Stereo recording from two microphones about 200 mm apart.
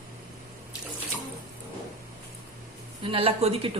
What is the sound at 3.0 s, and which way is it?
Speech, 25° right (ahead or behind).